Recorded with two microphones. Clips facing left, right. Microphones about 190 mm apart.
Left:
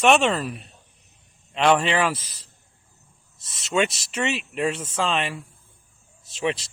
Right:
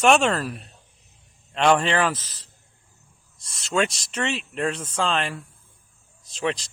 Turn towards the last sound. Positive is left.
turn(degrees=5)  # may be behind; listen again after turning